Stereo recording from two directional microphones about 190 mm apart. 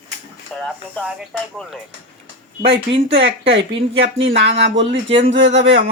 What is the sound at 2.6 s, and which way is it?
Speech, 30° right (ahead or behind).